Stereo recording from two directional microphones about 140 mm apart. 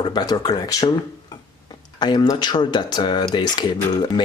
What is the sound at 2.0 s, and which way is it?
Speech, 30° left (ahead or behind).